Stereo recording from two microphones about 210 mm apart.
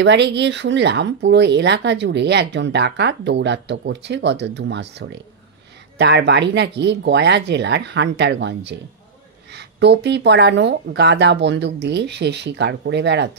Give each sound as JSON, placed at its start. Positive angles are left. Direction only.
{"t": 0.0, "sound": "speech", "side_deg": -55}